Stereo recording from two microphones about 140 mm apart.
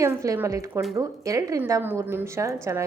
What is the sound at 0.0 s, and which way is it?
A woman's voice, 20° right (ahead or behind).